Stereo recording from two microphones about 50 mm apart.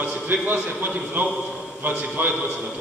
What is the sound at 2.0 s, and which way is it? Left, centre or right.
Speech, right.